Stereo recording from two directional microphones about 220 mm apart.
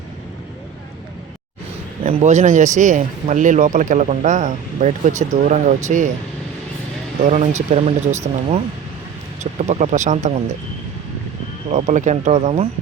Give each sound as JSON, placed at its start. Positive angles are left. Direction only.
{"t": 2.0, "sound": "a man's voice", "side_deg": -30}
{"t": 7.3, "sound": "a man's voice", "side_deg": -30}
{"t": 11.7, "sound": "a man's voice", "side_deg": -35}